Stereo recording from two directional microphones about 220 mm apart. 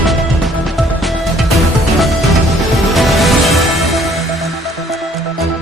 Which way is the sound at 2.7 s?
Centre (ahead or behind).